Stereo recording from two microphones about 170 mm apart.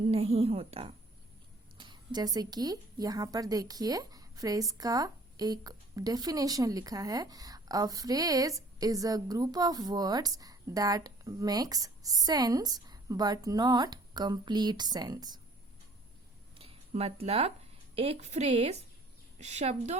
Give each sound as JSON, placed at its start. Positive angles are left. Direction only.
{"t": 0.0, "sound": "a woman's voice", "side_deg": -35}
{"t": 1.8, "sound": "a woman's voice", "side_deg": -25}
{"t": 16.6, "sound": "a sound", "side_deg": -35}
{"t": 17.9, "sound": "a woman's voice", "side_deg": -35}